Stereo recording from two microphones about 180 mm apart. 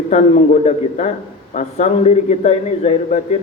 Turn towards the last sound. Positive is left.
turn(degrees=40)  # may be behind; listen again after turning